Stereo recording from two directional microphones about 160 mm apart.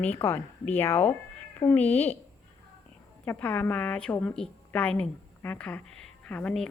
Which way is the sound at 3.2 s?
10° left (ahead or behind).